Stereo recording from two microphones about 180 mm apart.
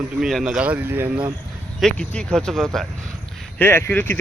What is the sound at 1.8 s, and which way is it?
Speech, 5° left (ahead or behind).